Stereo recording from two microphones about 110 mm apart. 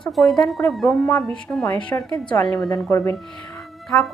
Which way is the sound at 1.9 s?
40° left (ahead or behind).